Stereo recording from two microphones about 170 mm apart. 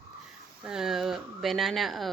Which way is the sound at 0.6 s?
5° right (ahead or behind).